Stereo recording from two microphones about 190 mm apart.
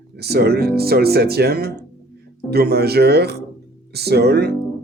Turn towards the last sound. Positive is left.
turn(degrees=-55)  # may be behind; listen again after turning